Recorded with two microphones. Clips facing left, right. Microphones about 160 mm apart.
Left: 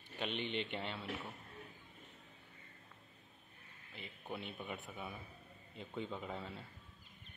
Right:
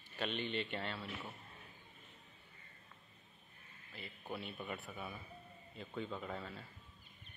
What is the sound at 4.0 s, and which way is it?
Speech, 20° left (ahead or behind).